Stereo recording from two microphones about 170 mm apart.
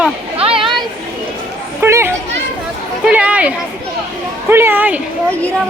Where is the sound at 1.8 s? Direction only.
15° right (ahead or behind).